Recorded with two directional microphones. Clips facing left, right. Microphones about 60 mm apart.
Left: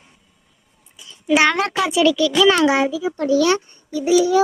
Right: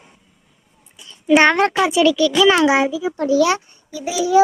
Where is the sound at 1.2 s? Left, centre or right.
Right.